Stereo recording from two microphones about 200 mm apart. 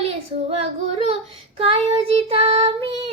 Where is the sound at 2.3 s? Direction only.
30° right (ahead or behind).